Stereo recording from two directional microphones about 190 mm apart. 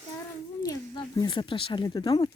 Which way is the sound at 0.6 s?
20° left (ahead or behind).